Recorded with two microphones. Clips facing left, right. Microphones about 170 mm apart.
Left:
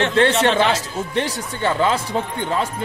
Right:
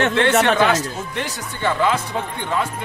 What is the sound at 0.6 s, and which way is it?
Speech, 30° left (ahead or behind).